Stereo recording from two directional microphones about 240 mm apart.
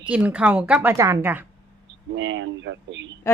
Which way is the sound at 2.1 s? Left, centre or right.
Right.